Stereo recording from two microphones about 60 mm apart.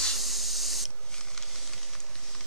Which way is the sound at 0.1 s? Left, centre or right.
Centre.